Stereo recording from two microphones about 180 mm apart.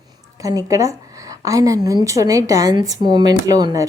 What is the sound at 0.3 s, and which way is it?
A woman's voice, 20° right (ahead or behind).